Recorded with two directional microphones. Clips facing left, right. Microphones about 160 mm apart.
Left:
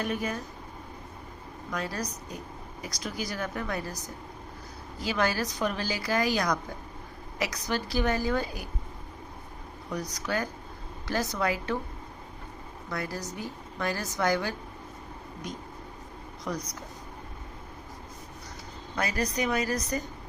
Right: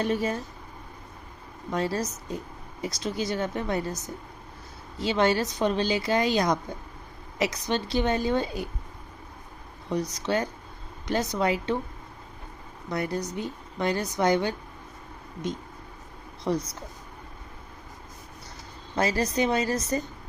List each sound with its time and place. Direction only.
0.0 s a woman's voice: 30° right (ahead or behind)
1.7 s a woman's voice: 30° right (ahead or behind)
9.9 s a woman's voice: 25° right (ahead or behind)
12.9 s a woman's voice: 20° right (ahead or behind)
18.9 s a woman's voice: 30° right (ahead or behind)